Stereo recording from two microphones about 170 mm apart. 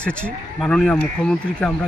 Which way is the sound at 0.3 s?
5° left (ahead or behind).